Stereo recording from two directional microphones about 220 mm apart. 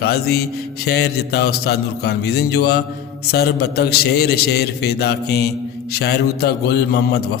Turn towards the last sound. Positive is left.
turn(degrees=50)  # may be behind; listen again after turning